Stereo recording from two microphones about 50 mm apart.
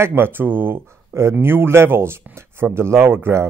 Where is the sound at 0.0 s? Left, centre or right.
Right.